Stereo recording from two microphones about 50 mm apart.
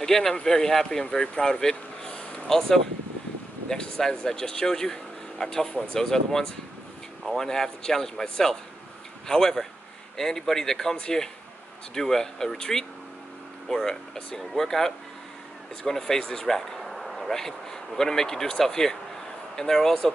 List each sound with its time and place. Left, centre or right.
0.0 s speech: centre
2.0 s vehicle: centre
3.6 s speech: centre